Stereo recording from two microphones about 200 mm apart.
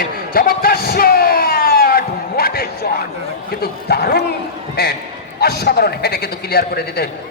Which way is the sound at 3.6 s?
50° left (ahead or behind).